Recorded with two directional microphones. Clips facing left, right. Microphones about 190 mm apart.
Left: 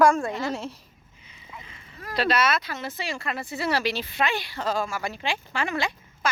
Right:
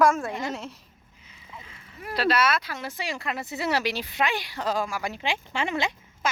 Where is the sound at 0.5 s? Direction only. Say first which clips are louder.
Left 3 dB; 30° left (ahead or behind).